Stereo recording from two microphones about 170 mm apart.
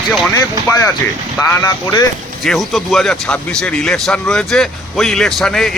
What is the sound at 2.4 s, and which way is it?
Speech, centre (ahead or behind).